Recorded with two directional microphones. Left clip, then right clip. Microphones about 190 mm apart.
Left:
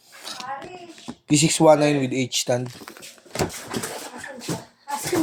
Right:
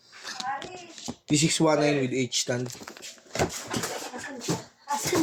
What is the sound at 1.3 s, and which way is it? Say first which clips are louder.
Speech: left 7 dB; 35° left (ahead or behind).